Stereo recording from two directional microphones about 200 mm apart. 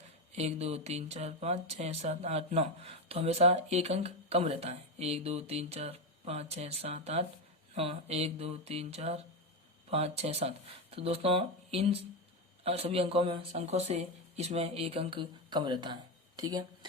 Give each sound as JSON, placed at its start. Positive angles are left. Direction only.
{"t": 0.3, "sound": "speech", "side_deg": -30}